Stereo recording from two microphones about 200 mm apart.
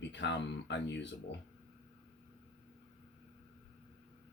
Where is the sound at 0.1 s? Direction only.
65° left (ahead or behind).